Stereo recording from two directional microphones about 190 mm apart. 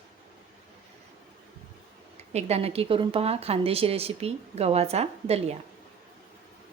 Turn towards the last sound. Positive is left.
turn(degrees=-35)  # may be behind; listen again after turning